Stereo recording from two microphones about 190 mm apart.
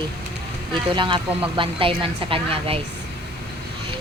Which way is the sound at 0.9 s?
25° right (ahead or behind).